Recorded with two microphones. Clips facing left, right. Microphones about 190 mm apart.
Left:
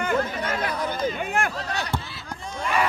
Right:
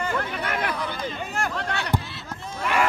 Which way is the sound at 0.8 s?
45° left (ahead or behind).